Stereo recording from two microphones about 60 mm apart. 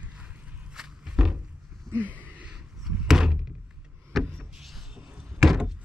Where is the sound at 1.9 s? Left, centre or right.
Centre.